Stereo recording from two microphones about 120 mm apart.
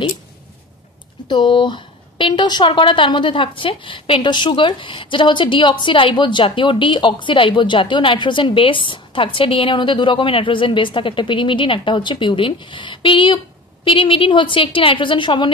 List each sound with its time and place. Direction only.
1.2 s a woman's voice: 40° left (ahead or behind)